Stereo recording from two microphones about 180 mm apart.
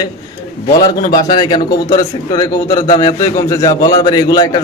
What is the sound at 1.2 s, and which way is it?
A man's voice, 25° left (ahead or behind).